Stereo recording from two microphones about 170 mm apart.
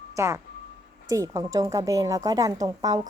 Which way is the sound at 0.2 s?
15° right (ahead or behind).